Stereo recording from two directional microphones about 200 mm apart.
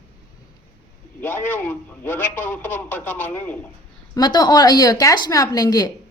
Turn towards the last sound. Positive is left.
turn(degrees=20)  # may be behind; listen again after turning